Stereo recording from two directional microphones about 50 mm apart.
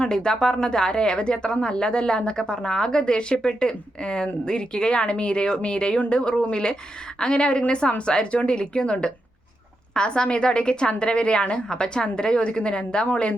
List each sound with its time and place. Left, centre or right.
0.0 s a woman's voice: centre